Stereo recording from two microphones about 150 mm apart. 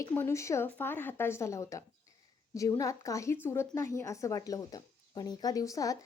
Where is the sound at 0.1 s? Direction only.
15° left (ahead or behind).